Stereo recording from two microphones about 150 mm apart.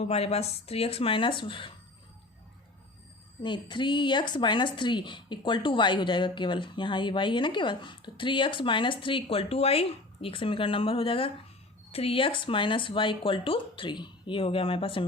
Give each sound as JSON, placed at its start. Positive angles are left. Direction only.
{"t": 0.0, "sound": "a woman's voice", "side_deg": 45}
{"t": 3.4, "sound": "a woman's voice", "side_deg": 30}